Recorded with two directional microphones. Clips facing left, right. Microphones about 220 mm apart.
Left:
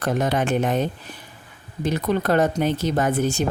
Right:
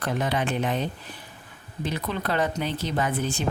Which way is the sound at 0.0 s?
45° left (ahead or behind).